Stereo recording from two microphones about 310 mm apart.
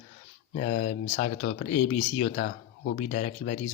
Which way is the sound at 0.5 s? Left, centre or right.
Left.